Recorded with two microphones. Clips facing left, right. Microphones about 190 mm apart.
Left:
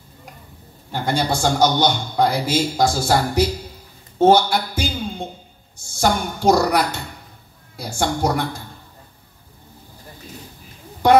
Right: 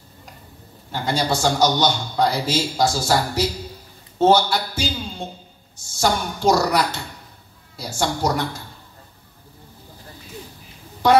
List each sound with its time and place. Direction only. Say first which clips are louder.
1.0 s speech: left 1 dB; 55° left (ahead or behind)
4.2 s a sound: left 2 dB; 55° left (ahead or behind)
5.8 s speech: left 2 dB; 55° left (ahead or behind)